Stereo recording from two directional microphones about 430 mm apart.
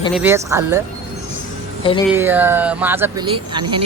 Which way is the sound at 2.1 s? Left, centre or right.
Centre.